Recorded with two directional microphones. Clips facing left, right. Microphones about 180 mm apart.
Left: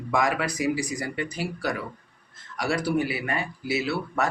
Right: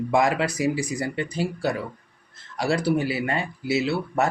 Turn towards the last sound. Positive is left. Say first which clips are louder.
# right 3 dB
turn(degrees=-25)  # may be behind; listen again after turning